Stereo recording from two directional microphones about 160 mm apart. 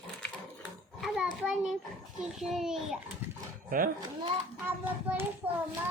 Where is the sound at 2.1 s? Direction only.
5° right (ahead or behind).